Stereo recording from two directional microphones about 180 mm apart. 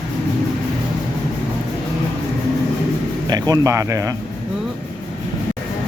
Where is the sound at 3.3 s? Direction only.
20° right (ahead or behind).